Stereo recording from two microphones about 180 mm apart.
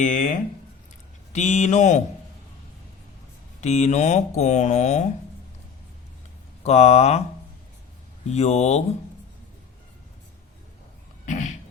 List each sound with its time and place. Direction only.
0.0 s speech: 45° left (ahead or behind)
3.6 s speech: 40° left (ahead or behind)
6.6 s speech: 35° left (ahead or behind)
8.3 s speech: 35° left (ahead or behind)
11.3 s a sound: 40° left (ahead or behind)